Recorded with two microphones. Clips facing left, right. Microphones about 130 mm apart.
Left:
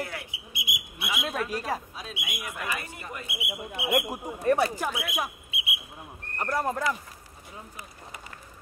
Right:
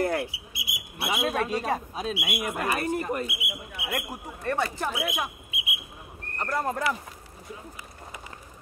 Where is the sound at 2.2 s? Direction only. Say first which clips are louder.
Right 7 dB; 55° right (ahead or behind).